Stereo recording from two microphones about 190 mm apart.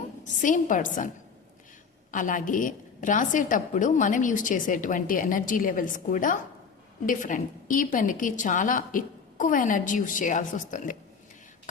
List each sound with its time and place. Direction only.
0.3 s a woman's voice: 40° left (ahead or behind)
2.1 s a woman's voice: 45° left (ahead or behind)